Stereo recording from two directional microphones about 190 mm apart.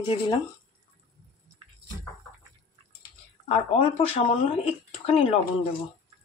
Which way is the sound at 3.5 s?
35° left (ahead or behind).